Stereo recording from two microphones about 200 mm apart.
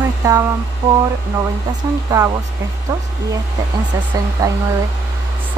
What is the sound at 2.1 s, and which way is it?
Speech, 20° right (ahead or behind).